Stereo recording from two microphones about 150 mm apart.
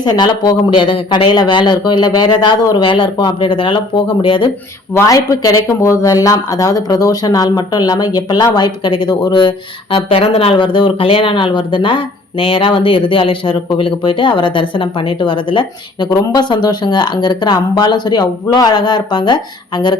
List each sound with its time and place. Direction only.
0.0 s a man's voice: 30° left (ahead or behind)
4.9 s speech: 20° left (ahead or behind)